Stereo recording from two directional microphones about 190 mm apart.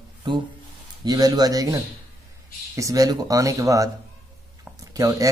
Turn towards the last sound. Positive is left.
turn(degrees=-20)  # may be behind; listen again after turning